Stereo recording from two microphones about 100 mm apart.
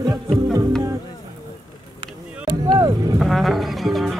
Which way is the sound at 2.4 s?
45° right (ahead or behind).